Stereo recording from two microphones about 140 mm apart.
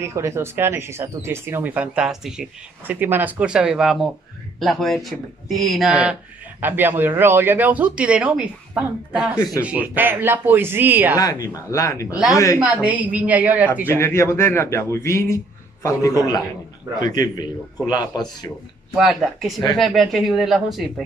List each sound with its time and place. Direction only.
0.0 s speech: 20° right (ahead or behind)
11.1 s a man's voice: 25° left (ahead or behind)
12.5 s speech: 10° right (ahead or behind)
13.9 s a man's voice: 20° left (ahead or behind)
18.9 s speech: centre (ahead or behind)